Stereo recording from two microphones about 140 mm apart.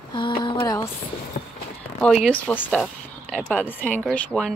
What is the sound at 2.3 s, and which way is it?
Speech, 10° left (ahead or behind).